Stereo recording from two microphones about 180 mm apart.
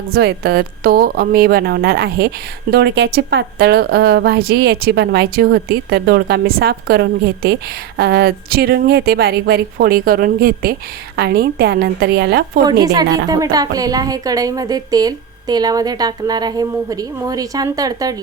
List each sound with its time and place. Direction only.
0.1 s a woman's voice: 60° right (ahead or behind)
12.8 s a woman's voice: 20° right (ahead or behind)